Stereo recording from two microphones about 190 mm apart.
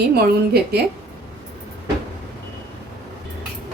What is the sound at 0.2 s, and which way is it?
Speech, 55° right (ahead or behind).